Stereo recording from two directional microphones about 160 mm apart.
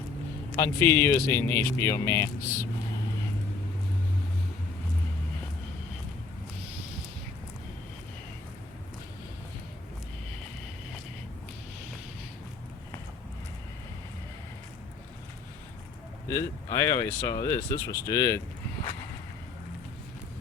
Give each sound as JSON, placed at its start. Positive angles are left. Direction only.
{"t": 0.5, "sound": "speech", "side_deg": 15}
{"t": 16.3, "sound": "speech", "side_deg": 20}